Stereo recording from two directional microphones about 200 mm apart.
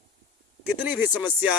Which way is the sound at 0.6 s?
10° right (ahead or behind).